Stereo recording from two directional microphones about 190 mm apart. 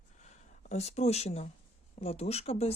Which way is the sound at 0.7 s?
35° left (ahead or behind).